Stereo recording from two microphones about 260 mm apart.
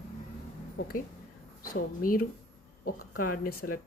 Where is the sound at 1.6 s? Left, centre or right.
Left.